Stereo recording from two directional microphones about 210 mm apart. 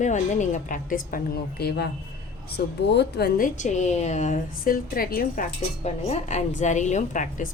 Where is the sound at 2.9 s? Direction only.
50° left (ahead or behind).